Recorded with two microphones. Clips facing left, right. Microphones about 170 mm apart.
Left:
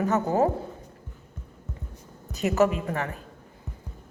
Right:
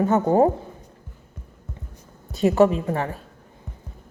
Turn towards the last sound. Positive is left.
turn(degrees=-30)  # may be behind; listen again after turning